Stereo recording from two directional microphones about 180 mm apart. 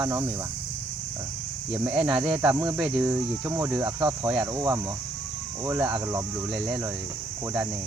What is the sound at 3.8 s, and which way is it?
Speech, 25° right (ahead or behind).